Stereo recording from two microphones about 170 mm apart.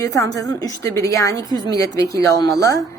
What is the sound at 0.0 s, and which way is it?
A woman's voice, 20° left (ahead or behind).